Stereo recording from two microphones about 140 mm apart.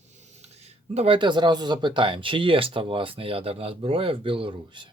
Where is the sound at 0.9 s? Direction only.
40° right (ahead or behind).